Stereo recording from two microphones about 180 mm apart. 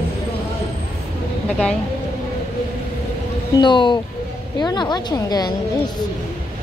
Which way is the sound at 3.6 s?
25° left (ahead or behind).